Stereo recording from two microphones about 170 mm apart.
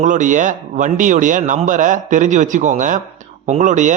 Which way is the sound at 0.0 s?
50° right (ahead or behind).